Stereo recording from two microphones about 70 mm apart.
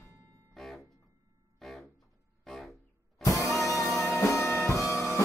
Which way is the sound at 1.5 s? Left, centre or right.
Centre.